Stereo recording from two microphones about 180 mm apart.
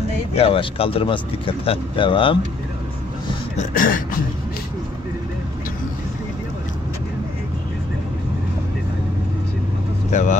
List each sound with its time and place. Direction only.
0.3 s speech: 30° left (ahead or behind)
3.5 s a sound: 50° left (ahead or behind)
10.1 s speech: 40° left (ahead or behind)